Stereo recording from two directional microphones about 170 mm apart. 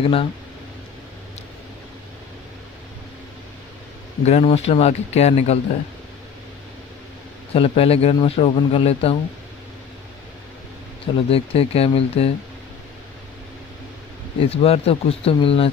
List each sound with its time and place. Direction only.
0.0 s speech: 35° left (ahead or behind)
4.2 s speech: 40° left (ahead or behind)
7.5 s speech: 35° left (ahead or behind)
11.2 s speech: 35° left (ahead or behind)
14.5 s speech: 35° left (ahead or behind)